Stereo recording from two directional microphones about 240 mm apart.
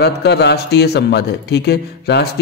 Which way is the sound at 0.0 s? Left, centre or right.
Left.